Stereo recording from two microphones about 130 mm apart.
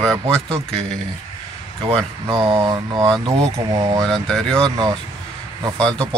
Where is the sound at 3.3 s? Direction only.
25° right (ahead or behind).